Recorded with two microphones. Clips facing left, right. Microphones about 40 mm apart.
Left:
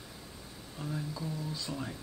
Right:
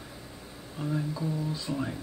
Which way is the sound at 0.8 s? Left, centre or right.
Centre.